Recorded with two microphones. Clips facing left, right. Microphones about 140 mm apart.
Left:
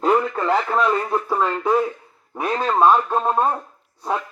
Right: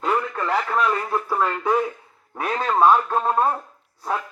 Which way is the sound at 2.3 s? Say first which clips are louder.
Left 2 dB; 10° left (ahead or behind).